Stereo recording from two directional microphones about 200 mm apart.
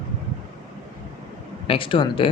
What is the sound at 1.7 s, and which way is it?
Speech, 25° left (ahead or behind).